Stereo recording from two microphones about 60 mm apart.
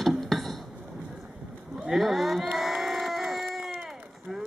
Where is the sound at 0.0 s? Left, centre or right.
Centre.